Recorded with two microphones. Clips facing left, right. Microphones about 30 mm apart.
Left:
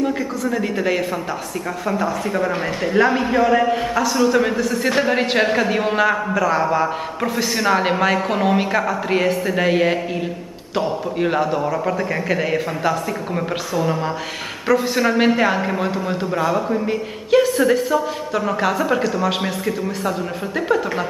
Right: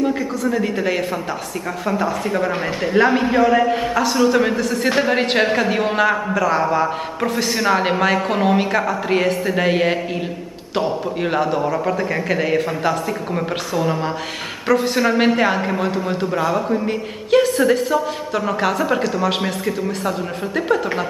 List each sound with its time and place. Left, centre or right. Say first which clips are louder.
0.0 s a man's voice: right 1 dB; centre